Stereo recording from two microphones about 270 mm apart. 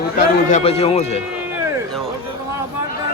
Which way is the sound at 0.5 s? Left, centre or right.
Left.